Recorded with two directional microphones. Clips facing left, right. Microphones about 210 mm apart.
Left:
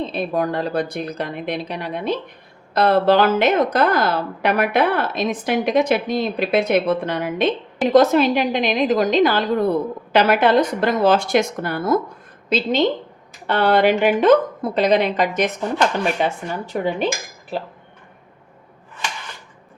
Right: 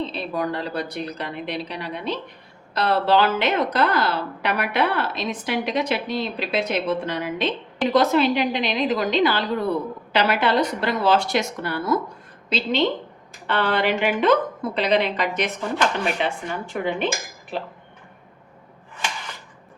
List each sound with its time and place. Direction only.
0.0 s a woman's voice: 50° left (ahead or behind)